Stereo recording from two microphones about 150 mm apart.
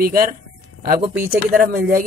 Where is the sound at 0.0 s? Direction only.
70° right (ahead or behind).